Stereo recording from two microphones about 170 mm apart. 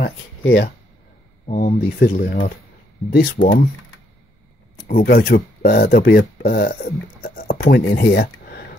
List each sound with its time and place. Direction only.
0.0 s speech: 90° left
1.5 s speech: 55° left (ahead or behind)
3.1 s speech: 70° left (ahead or behind)
4.8 s speech: 60° left (ahead or behind)